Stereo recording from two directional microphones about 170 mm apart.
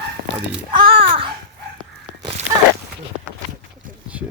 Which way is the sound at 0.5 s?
30° right (ahead or behind).